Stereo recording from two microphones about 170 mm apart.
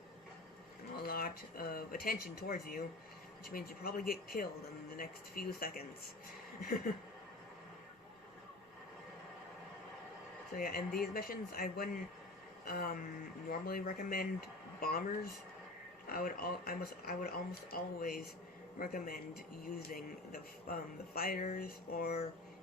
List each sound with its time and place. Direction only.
0.9 s speech: 60° left (ahead or behind)
10.5 s speech: 60° left (ahead or behind)